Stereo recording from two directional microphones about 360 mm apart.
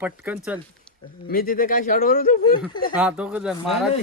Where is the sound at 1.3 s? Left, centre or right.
Left.